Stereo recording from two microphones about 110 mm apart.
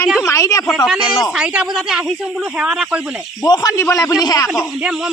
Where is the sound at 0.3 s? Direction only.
30° left (ahead or behind).